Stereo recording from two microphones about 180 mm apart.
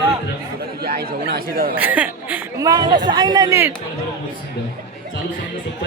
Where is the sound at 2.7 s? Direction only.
25° right (ahead or behind).